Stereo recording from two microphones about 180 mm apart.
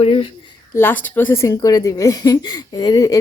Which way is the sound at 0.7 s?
10° left (ahead or behind).